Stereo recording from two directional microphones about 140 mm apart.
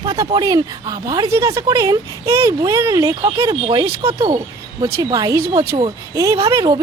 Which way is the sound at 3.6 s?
40° right (ahead or behind).